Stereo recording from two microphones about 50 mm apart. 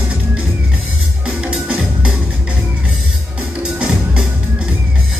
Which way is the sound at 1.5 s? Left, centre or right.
Right.